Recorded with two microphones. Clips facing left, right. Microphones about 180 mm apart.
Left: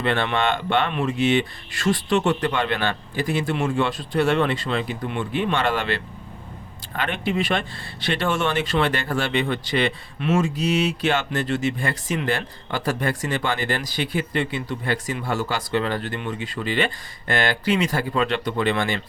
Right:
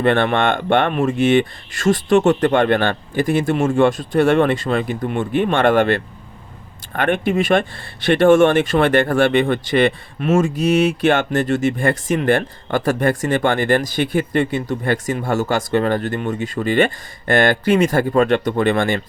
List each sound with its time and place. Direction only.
0.0 s speech: 50° right (ahead or behind)